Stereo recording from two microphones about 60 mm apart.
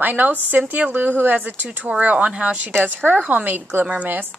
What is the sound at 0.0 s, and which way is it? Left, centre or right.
Speech, right.